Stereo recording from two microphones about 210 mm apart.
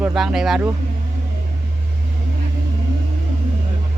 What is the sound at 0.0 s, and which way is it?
Speech, 5° right (ahead or behind).